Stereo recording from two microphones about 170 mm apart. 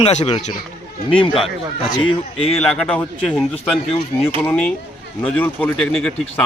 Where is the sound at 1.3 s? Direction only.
Centre (ahead or behind).